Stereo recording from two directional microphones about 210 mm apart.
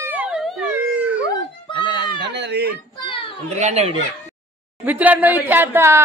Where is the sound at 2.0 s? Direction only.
55° right (ahead or behind).